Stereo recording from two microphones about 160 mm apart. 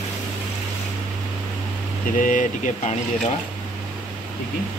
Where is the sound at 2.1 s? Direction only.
55° left (ahead or behind).